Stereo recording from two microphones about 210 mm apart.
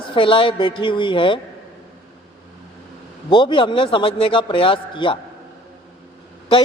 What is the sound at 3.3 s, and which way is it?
Speech, 25° left (ahead or behind).